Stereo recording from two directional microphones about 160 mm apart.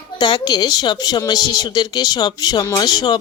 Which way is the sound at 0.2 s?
25° left (ahead or behind).